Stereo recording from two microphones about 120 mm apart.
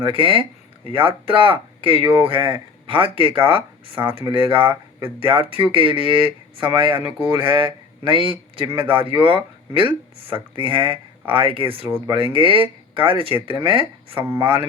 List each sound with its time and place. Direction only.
0.0 s speech: 45° right (ahead or behind)
11.9 s speech: 20° right (ahead or behind)
12.1 s speech: 50° right (ahead or behind)